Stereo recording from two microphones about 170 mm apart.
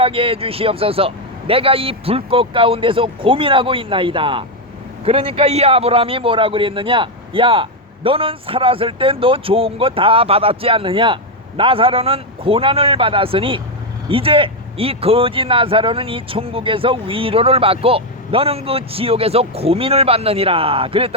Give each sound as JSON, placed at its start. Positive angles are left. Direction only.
{"t": 0.0, "sound": "a man's voice", "side_deg": -35}